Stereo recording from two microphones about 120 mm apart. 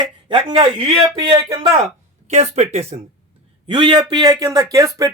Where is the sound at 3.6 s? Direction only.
40° right (ahead or behind).